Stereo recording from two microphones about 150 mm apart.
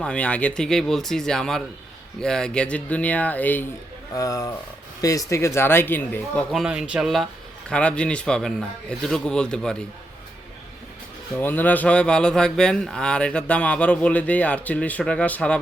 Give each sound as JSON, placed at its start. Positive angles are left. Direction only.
{"t": 0.0, "sound": "a man's voice", "side_deg": 5}
{"t": 4.1, "sound": "speech", "side_deg": 25}
{"t": 6.5, "sound": "a man's voice", "side_deg": -5}
{"t": 11.3, "sound": "speech", "side_deg": 10}